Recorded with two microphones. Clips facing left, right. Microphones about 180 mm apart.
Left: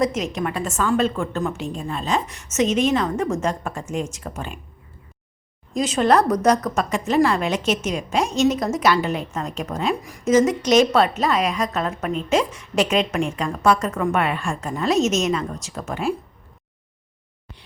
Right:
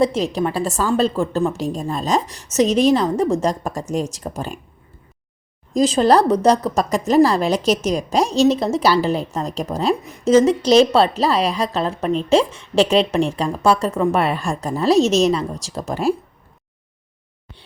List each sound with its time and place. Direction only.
0.0 s a woman's voice: 35° right (ahead or behind)
5.7 s a woman's voice: 35° right (ahead or behind)
10.0 s a woman's voice: 20° right (ahead or behind)